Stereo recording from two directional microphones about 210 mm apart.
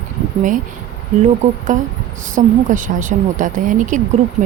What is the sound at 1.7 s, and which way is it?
A woman's voice, 35° right (ahead or behind).